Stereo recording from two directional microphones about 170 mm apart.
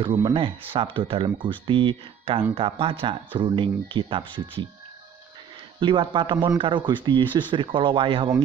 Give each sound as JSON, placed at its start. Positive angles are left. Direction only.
{"t": 0.0, "sound": "speech", "side_deg": -30}
{"t": 5.8, "sound": "speech", "side_deg": -30}